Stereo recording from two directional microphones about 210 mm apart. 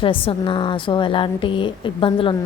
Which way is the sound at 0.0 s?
25° left (ahead or behind).